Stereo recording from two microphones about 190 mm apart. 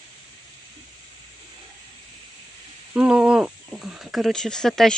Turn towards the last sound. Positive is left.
turn(degrees=0)  # may be behind; listen again after turning